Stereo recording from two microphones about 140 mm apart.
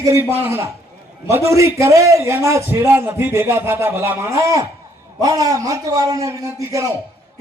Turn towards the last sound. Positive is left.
turn(degrees=-20)  # may be behind; listen again after turning